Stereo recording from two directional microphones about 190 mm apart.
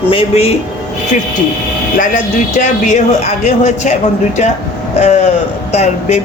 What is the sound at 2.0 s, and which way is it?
Speech, 40° left (ahead or behind).